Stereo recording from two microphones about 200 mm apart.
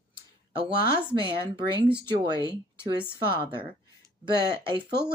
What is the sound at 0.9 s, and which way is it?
A woman's voice, 25° right (ahead or behind).